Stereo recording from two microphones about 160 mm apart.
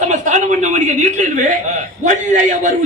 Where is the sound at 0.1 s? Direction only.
50° right (ahead or behind).